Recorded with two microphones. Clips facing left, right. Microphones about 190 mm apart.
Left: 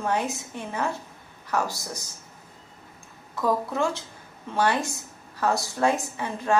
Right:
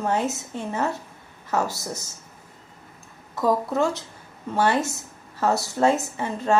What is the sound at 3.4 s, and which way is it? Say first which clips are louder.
A woman's voice: right 3 dB; 20° right (ahead or behind).